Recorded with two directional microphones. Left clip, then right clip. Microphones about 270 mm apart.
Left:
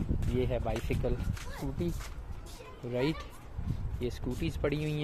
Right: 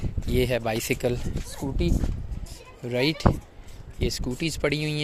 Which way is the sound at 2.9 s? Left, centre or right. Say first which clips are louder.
Right 9 dB; right.